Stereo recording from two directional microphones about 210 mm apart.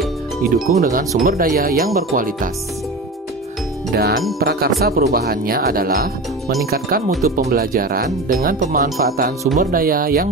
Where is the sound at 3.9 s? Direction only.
50° right (ahead or behind).